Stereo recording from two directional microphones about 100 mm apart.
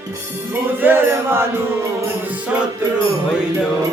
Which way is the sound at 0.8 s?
20° right (ahead or behind).